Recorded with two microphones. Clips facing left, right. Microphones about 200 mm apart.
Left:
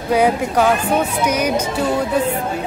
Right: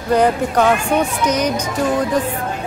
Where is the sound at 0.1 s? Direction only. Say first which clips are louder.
Right 1 dB; 10° left (ahead or behind).